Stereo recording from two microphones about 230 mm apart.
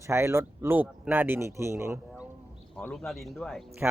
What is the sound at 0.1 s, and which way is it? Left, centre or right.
Speech, centre.